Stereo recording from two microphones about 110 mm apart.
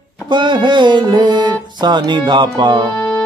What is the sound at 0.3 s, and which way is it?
Music, 45° right (ahead or behind).